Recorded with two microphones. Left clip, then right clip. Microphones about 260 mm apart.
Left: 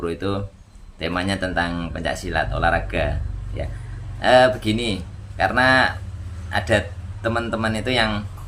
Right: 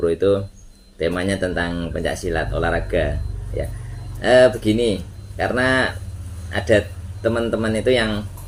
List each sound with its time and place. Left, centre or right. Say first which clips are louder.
0.0 s speech: right 8 dB; centre
4.2 s a man's voice: right 1 dB; centre